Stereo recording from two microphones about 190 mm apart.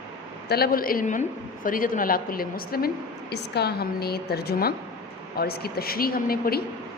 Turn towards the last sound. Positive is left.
turn(degrees=50)  # may be behind; listen again after turning